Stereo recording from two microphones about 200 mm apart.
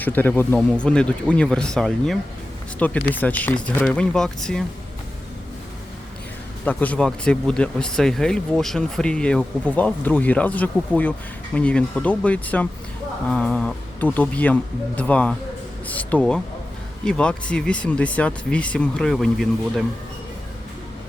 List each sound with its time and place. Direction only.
0.0 s speech: 10° left (ahead or behind)
6.7 s speech: 5° left (ahead or behind)